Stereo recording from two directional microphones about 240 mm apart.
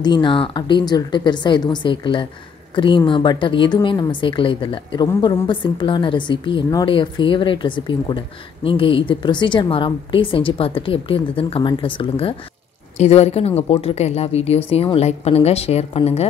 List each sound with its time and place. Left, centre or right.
0.0 s a woman's voice: centre